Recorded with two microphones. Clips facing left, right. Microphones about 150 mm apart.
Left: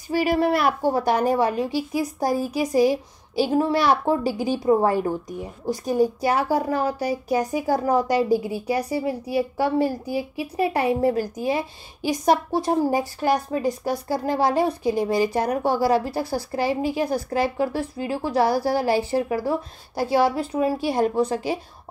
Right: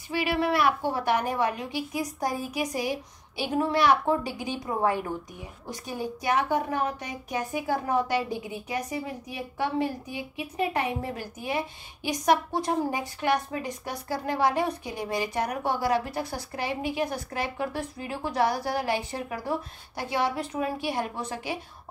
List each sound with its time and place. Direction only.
0.1 s a woman's voice: 40° left (ahead or behind)